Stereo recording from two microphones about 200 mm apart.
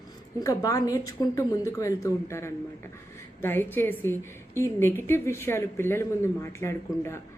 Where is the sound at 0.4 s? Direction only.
15° left (ahead or behind).